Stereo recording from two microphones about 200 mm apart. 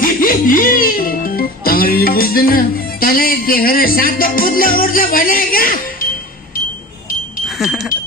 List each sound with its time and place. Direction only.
0.0 s music: 45° left (ahead or behind)
7.4 s wind chime: centre (ahead or behind)